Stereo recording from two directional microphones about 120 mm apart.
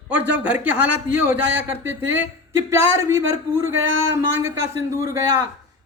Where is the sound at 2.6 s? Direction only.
25° right (ahead or behind).